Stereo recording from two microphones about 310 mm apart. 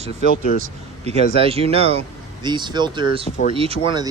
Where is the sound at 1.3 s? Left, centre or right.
Centre.